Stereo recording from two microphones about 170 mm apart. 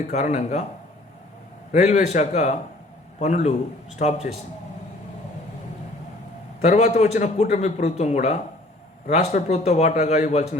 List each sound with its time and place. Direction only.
0.1 s a man's voice: 45° left (ahead or behind)
1.7 s a man's voice: 45° left (ahead or behind)
6.6 s a man's voice: 40° left (ahead or behind)